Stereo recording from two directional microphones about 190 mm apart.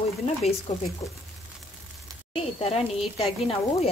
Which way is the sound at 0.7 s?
35° left (ahead or behind).